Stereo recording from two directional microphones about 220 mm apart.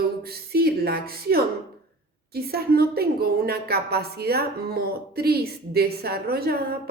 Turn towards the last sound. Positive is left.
turn(degrees=-45)  # may be behind; listen again after turning